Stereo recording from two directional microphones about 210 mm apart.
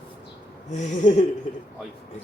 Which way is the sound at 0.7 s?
35° left (ahead or behind).